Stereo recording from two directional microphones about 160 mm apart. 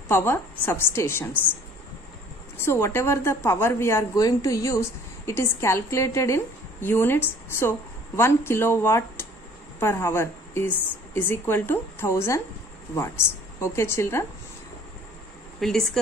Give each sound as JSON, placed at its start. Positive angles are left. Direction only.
{"t": 0.1, "sound": "a woman's voice", "side_deg": 15}
{"t": 2.5, "sound": "a woman's voice", "side_deg": 15}
{"t": 15.6, "sound": "speech", "side_deg": 0}